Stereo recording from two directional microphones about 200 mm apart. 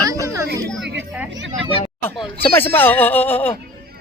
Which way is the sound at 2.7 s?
10° left (ahead or behind).